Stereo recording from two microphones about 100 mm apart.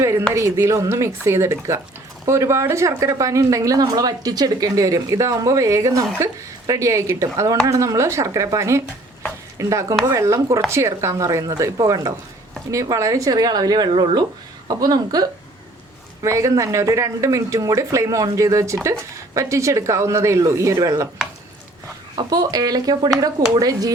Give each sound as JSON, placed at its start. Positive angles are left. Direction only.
{"t": 0.0, "sound": "a woman's voice", "side_deg": -30}
{"t": 14.7, "sound": "speech", "side_deg": -40}
{"t": 22.3, "sound": "speech", "side_deg": -40}